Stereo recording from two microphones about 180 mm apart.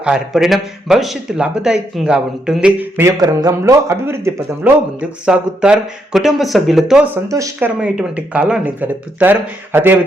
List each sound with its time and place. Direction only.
0.0 s speech: 5° right (ahead or behind)
7.3 s speech: 20° right (ahead or behind)
7.8 s speech: 5° right (ahead or behind)